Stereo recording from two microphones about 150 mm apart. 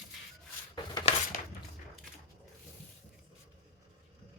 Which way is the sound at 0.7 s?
25° left (ahead or behind).